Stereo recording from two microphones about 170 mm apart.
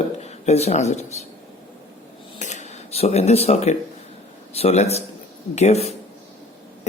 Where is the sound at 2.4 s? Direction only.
45° left (ahead or behind).